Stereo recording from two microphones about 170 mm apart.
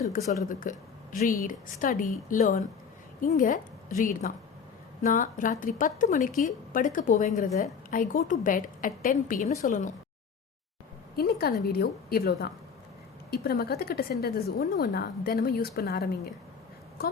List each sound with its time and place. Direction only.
0.4 s a woman's voice: 55° left (ahead or behind)
11.2 s a woman's voice: 65° left (ahead or behind)